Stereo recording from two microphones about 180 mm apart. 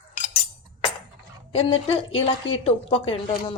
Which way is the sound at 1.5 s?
35° left (ahead or behind).